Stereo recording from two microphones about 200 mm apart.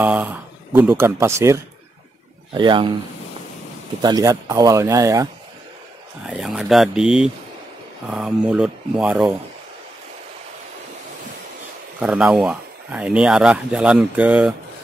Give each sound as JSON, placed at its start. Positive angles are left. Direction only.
{"t": 0.0, "sound": "speech", "side_deg": -5}
{"t": 4.0, "sound": "speech", "side_deg": -20}
{"t": 6.2, "sound": "speech", "side_deg": 0}
{"t": 12.0, "sound": "speech", "side_deg": -5}